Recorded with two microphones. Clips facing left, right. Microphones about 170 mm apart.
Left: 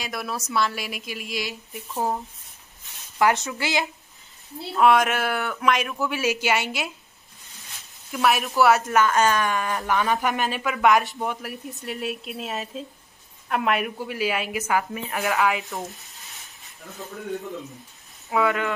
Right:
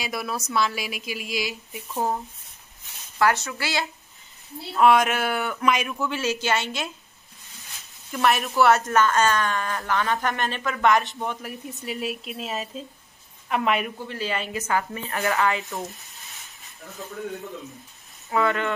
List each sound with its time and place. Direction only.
0.0 s speech: centre (ahead or behind)
3.2 s speech: 20° left (ahead or behind)
4.7 s speech: centre (ahead or behind)
8.1 s a woman's voice: 5° left (ahead or behind)
18.3 s a woman's voice: 5° left (ahead or behind)